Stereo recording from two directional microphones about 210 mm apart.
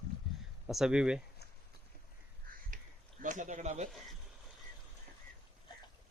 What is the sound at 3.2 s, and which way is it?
Speech, 35° right (ahead or behind).